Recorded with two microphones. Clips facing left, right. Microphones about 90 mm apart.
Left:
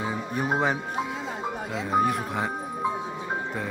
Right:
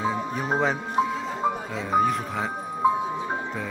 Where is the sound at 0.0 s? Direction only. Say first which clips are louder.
Right 2 dB; 5° left (ahead or behind).